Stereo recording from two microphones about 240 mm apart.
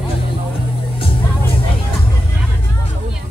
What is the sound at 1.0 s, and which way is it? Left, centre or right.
Music, left.